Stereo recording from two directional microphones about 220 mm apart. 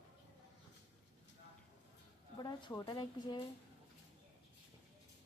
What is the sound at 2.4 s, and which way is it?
Speech, 20° left (ahead or behind).